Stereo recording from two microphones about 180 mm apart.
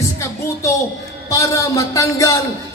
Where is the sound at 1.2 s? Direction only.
15° left (ahead or behind).